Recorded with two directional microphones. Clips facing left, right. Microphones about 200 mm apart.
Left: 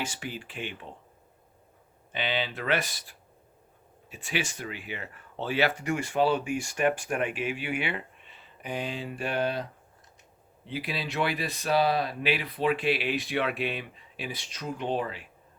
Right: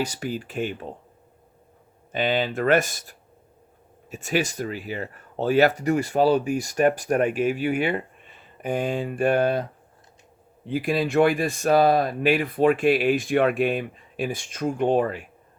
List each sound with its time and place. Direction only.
0.0 s speech: 40° right (ahead or behind)
2.1 s speech: 45° right (ahead or behind)
10.7 s speech: 50° right (ahead or behind)